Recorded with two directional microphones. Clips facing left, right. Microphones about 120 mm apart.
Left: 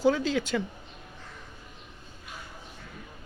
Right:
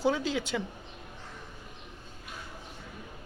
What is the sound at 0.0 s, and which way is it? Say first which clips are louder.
Speech: left 4 dB; 20° right (ahead or behind).